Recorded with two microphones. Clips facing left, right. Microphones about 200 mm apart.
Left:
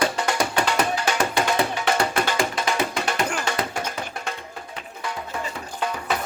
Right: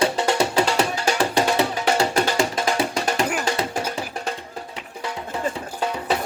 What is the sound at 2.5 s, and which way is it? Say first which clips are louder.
Music: right 2 dB; 45° right (ahead or behind).